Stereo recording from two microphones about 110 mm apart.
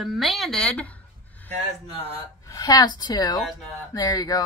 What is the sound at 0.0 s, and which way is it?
A woman's voice, centre (ahead or behind).